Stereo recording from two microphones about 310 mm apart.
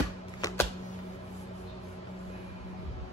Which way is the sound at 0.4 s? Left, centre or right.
Centre.